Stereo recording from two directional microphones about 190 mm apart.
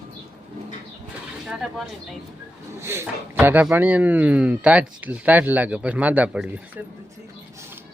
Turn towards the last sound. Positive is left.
turn(degrees=-10)  # may be behind; listen again after turning